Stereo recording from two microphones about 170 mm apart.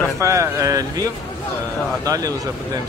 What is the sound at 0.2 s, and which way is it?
Speech, 20° right (ahead or behind).